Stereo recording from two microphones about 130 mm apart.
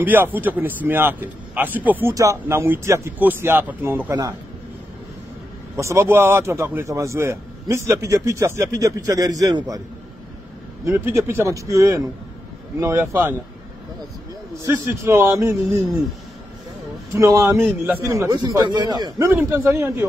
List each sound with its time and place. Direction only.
0.0 s a man's voice: 15° right (ahead or behind)
5.8 s a man's voice: 20° right (ahead or behind)
10.9 s a man's voice: 20° right (ahead or behind)
14.7 s a man's voice: 20° right (ahead or behind)
17.1 s a man's voice: 25° right (ahead or behind)